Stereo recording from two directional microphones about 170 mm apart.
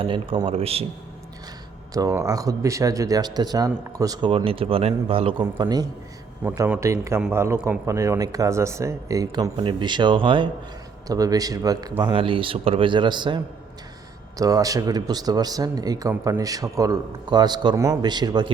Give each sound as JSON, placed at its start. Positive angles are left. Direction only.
{"t": 0.0, "sound": "a man's voice", "side_deg": -30}
{"t": 1.9, "sound": "speech", "side_deg": -20}
{"t": 5.5, "sound": "speech", "side_deg": -25}
{"t": 6.4, "sound": "a man's voice", "side_deg": -10}